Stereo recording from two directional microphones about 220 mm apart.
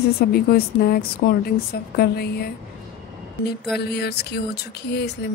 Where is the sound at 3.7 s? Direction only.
50° left (ahead or behind).